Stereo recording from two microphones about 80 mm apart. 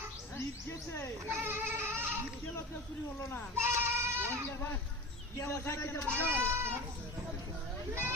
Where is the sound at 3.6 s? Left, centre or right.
Right.